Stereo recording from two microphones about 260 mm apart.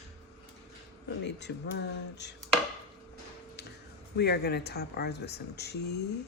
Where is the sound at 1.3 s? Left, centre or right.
Left.